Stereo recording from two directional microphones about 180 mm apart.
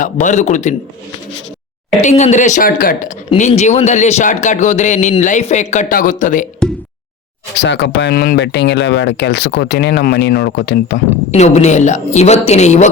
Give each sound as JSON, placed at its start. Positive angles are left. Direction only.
{"t": 0.0, "sound": "speech", "side_deg": 45}
{"t": 2.0, "sound": "speech", "side_deg": 40}
{"t": 3.2, "sound": "speech", "side_deg": 40}
{"t": 6.6, "sound": "a sound", "side_deg": 5}
{"t": 7.6, "sound": "speech", "side_deg": 70}
{"t": 11.3, "sound": "speech", "side_deg": 40}